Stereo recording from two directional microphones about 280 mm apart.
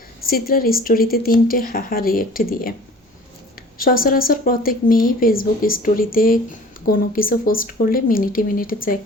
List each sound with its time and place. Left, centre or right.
0.3 s speech: left
3.8 s speech: left